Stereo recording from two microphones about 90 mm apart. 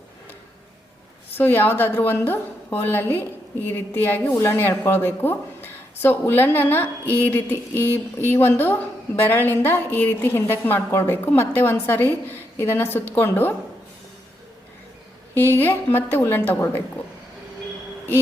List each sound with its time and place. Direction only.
1.4 s a woman's voice: 20° left (ahead or behind)
15.4 s a woman's voice: 25° left (ahead or behind)